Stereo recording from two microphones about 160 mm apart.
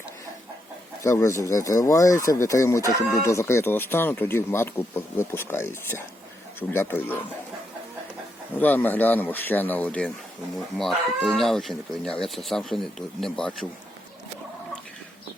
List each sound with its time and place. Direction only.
1.0 s speech: 20° left (ahead or behind)
8.5 s speech: 10° left (ahead or behind)